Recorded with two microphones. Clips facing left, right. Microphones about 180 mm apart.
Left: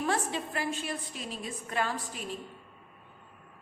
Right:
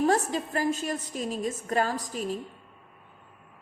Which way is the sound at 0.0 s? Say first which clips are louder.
Right 6 dB; 40° right (ahead or behind).